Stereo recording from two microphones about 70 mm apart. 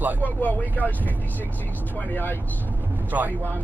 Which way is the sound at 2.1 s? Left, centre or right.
Left.